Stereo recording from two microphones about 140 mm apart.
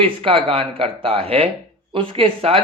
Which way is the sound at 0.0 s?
45° right (ahead or behind).